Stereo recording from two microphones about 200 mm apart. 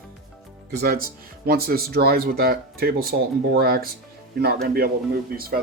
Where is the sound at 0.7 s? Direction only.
50° right (ahead or behind).